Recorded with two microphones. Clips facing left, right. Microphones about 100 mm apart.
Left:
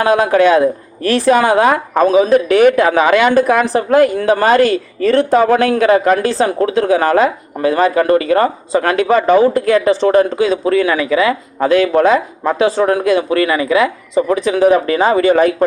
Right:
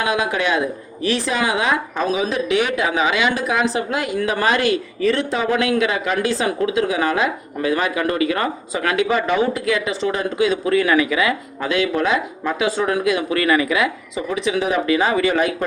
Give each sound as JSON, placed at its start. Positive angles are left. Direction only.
{"t": 0.0, "sound": "speech", "side_deg": 45}